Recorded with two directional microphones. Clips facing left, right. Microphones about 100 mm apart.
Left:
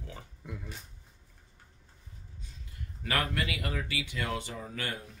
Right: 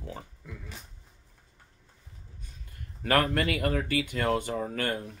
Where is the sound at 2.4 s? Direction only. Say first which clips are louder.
Left 1 dB; 50° right (ahead or behind).